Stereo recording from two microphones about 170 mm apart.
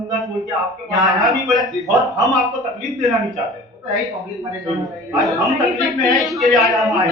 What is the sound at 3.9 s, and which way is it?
Speech, 20° right (ahead or behind).